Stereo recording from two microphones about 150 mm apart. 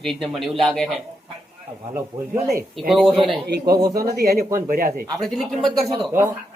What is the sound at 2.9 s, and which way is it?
Speech, centre (ahead or behind).